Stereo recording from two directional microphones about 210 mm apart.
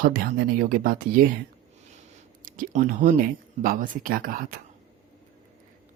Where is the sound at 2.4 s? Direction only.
40° right (ahead or behind).